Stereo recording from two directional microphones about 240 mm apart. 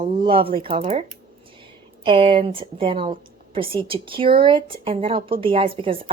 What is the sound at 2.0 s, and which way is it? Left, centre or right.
A woman's voice, right.